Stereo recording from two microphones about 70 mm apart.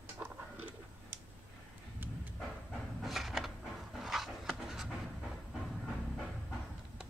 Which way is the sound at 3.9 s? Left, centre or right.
Centre.